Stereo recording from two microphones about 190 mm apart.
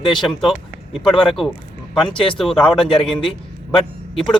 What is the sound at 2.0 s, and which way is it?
Speech, 25° left (ahead or behind).